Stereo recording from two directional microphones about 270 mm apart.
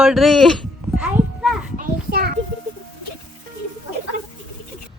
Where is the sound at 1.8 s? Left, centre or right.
Right.